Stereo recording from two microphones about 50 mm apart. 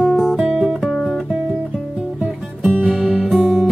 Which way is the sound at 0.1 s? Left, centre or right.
Centre.